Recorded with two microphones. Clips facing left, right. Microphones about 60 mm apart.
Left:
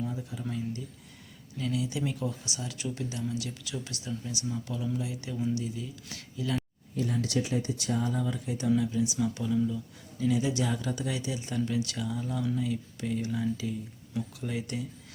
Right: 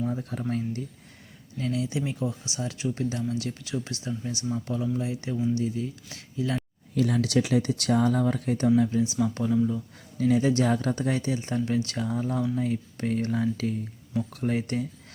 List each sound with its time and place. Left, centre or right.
0.0 s speech: right
1.5 s speech: right
6.9 s speech: right
8.8 s speech: right